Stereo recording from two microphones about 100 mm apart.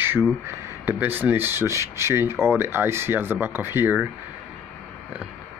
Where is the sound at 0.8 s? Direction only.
20° right (ahead or behind).